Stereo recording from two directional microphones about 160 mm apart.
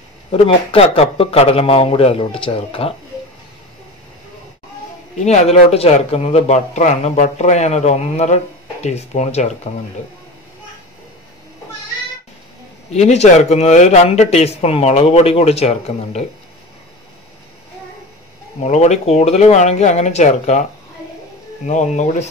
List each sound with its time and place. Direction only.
0.3 s a man's voice: 35° left (ahead or behind)
5.2 s speech: 45° left (ahead or behind)
12.9 s speech: 45° left (ahead or behind)
18.6 s speech: 45° left (ahead or behind)
21.6 s speech: 50° left (ahead or behind)